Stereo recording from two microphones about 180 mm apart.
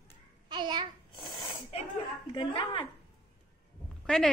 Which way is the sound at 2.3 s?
25° left (ahead or behind).